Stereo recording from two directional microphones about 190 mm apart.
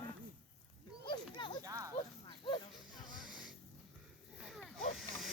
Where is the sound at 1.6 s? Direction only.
20° right (ahead or behind).